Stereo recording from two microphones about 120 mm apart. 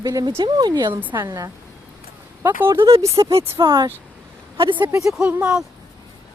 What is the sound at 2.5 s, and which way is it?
Speech, 20° right (ahead or behind).